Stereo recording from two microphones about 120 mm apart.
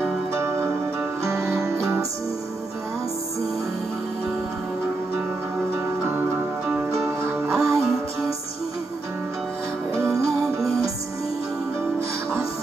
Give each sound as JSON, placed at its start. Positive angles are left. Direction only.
{"t": 1.2, "sound": "music", "side_deg": -25}
{"t": 7.4, "sound": "music", "side_deg": -25}
{"t": 9.9, "sound": "music", "side_deg": -25}